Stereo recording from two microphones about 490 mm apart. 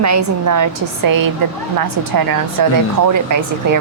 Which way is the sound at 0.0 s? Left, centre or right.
Right.